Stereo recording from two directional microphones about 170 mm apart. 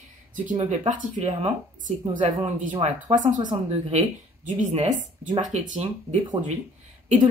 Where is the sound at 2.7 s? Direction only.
30° right (ahead or behind).